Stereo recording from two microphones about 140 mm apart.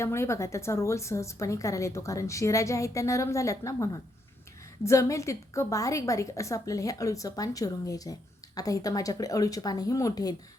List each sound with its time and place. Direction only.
0.0 s a woman's voice: 20° left (ahead or behind)